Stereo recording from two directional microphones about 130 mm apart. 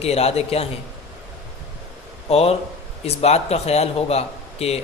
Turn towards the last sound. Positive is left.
turn(degrees=55)  # may be behind; listen again after turning